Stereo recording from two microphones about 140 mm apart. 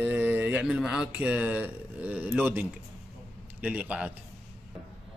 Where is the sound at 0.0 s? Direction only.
10° right (ahead or behind).